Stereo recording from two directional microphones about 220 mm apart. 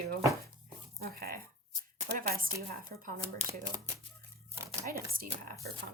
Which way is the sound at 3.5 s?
15° right (ahead or behind).